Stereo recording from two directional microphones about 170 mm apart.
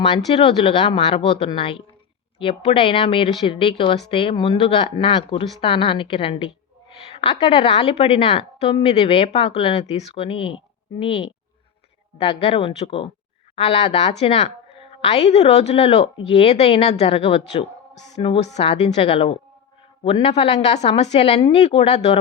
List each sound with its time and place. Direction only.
0.3 s a woman's voice: 35° left (ahead or behind)